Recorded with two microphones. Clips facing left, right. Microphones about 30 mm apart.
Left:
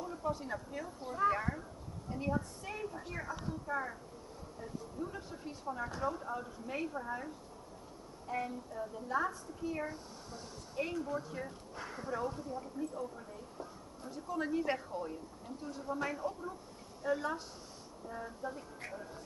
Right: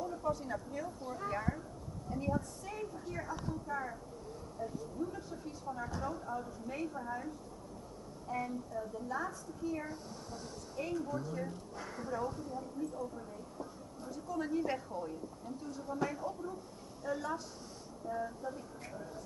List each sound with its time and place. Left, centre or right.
0.0 s a woman's voice: centre
8.3 s a woman's voice: left